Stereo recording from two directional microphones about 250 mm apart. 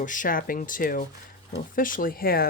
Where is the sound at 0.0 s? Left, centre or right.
Left.